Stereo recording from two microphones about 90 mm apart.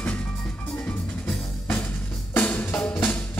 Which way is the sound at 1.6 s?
25° left (ahead or behind).